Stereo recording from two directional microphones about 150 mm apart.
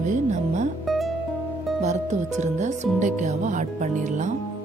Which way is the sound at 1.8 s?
50° right (ahead or behind).